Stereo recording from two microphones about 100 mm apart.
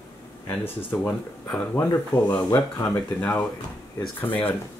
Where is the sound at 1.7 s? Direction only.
25° left (ahead or behind).